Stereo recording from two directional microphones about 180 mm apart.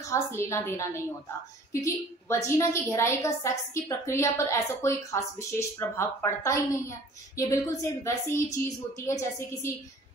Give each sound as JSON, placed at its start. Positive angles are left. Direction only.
{"t": 0.0, "sound": "a woman's voice", "side_deg": 15}